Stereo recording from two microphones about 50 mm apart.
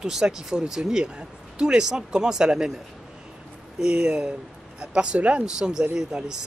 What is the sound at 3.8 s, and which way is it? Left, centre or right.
Speech, centre.